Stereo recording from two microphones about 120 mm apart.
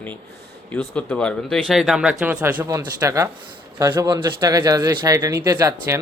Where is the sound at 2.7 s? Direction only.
25° right (ahead or behind).